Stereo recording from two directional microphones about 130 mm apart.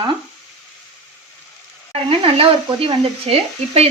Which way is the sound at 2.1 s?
45° right (ahead or behind).